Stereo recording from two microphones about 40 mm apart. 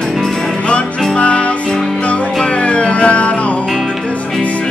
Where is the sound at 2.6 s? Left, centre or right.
Left.